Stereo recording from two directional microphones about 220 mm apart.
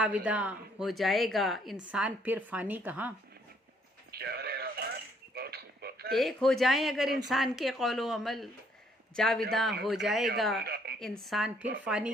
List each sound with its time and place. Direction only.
0.0 s a woman's voice: 5° right (ahead or behind)
4.1 s synthetic singing: 45° right (ahead or behind)
5.3 s a sound: 45° right (ahead or behind)
6.1 s a woman's voice: centre (ahead or behind)
10.6 s a woman's voice: 45° right (ahead or behind)
11.0 s a woman's voice: centre (ahead or behind)